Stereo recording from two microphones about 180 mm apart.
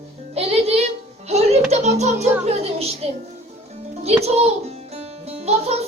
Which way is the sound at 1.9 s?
40° right (ahead or behind).